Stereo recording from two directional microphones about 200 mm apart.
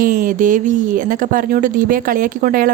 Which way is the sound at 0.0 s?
45° right (ahead or behind).